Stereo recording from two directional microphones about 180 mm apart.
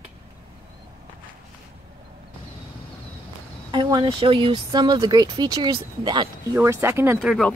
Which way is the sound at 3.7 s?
25° right (ahead or behind).